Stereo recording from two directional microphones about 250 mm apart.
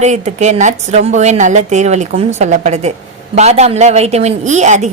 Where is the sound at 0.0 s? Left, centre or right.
Right.